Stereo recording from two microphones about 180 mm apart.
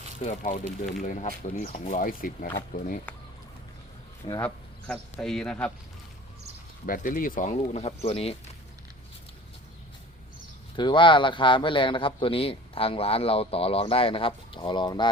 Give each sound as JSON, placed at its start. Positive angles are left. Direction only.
{"t": 0.2, "sound": "speech", "side_deg": 40}
{"t": 4.4, "sound": "speech", "side_deg": 5}
{"t": 6.8, "sound": "speech", "side_deg": 50}
{"t": 10.8, "sound": "speech", "side_deg": 25}